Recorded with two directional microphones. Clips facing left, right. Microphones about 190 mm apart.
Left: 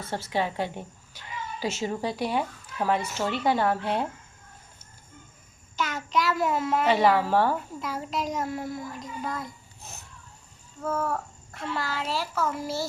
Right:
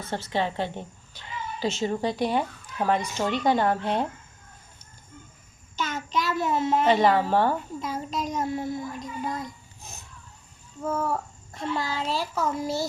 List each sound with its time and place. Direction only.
0.0 s a woman's voice: 10° left (ahead or behind)
5.7 s child singing: 25° right (ahead or behind)
6.8 s a woman's voice: 5° left (ahead or behind)
7.8 s a child's voice: 20° right (ahead or behind)